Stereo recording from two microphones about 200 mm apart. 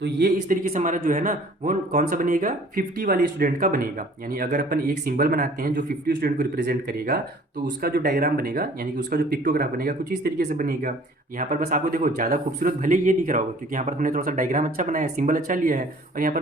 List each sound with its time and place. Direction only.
0.0 s a man's voice: 45° right (ahead or behind)